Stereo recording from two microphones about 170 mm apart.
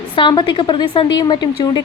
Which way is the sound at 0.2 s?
25° left (ahead or behind).